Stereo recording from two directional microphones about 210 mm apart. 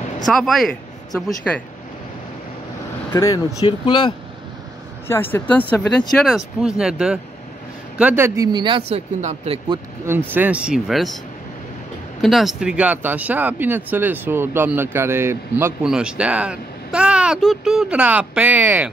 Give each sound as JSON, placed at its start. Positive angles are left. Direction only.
{"t": 0.3, "sound": "speech", "side_deg": 0}
{"t": 3.1, "sound": "speech", "side_deg": 15}
{"t": 5.0, "sound": "speech", "side_deg": 10}
{"t": 8.5, "sound": "speech", "side_deg": -20}
{"t": 10.0, "sound": "speech", "side_deg": -10}
{"t": 12.2, "sound": "speech", "side_deg": 0}